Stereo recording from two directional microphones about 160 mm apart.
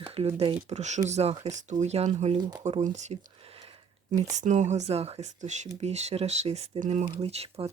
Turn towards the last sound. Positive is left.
turn(degrees=-40)  # may be behind; listen again after turning